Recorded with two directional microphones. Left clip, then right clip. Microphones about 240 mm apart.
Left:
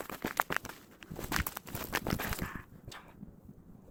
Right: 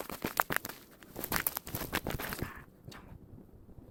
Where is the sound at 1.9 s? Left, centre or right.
Centre.